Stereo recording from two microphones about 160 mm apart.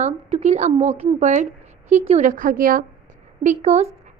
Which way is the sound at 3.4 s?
50° right (ahead or behind).